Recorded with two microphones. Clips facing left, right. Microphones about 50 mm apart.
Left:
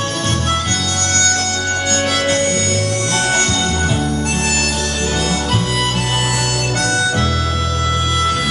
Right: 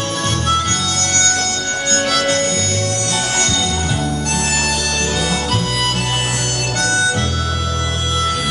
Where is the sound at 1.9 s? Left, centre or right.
Centre.